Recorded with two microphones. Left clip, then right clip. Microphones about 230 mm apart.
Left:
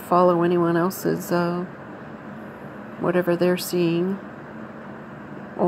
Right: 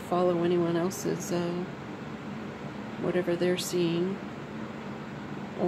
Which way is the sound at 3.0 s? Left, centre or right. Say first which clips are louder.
Left 7 dB; centre.